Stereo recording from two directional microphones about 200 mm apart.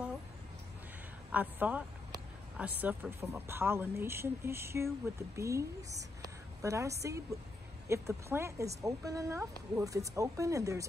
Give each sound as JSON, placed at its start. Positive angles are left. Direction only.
{"t": 1.3, "sound": "speech", "side_deg": -10}